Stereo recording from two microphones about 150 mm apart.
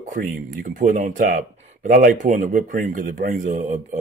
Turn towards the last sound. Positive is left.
turn(degrees=-60)  # may be behind; listen again after turning